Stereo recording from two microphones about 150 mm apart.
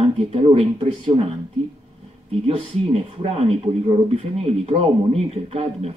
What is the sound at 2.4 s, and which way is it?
Speech, 45° right (ahead or behind).